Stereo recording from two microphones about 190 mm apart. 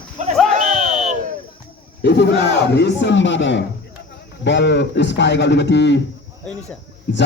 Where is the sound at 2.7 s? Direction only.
70° left (ahead or behind).